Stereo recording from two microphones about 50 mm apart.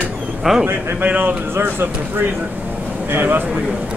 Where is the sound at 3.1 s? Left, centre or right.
Right.